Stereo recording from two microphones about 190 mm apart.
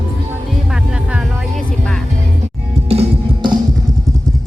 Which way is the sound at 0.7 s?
5° right (ahead or behind).